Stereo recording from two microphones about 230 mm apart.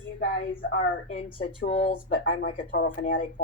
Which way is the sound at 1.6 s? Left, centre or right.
Left.